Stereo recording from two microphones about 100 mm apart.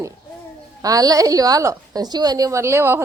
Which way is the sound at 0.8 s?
35° right (ahead or behind).